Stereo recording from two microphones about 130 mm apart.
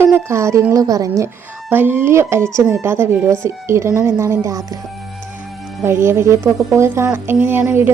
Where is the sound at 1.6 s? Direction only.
15° right (ahead or behind).